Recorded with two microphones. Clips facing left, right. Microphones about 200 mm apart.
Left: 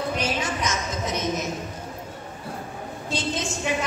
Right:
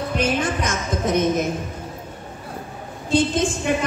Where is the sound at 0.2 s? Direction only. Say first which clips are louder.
Right 5 dB; 55° right (ahead or behind).